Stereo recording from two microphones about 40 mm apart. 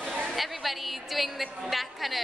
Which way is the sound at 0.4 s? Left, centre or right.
Centre.